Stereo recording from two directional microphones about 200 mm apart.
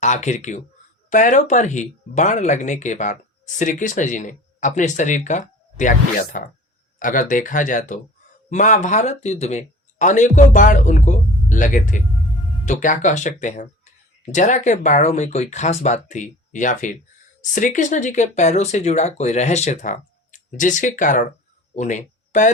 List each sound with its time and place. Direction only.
0.0 s speech: 35° left (ahead or behind)